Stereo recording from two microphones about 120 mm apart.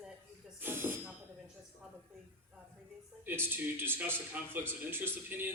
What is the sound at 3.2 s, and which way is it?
A man's voice, 20° right (ahead or behind).